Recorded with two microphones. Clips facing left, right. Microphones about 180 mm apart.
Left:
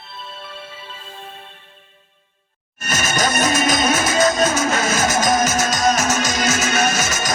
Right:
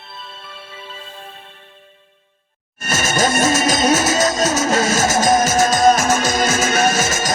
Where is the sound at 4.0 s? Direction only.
25° right (ahead or behind).